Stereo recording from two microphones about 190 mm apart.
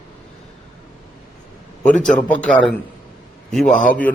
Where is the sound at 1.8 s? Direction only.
5° left (ahead or behind).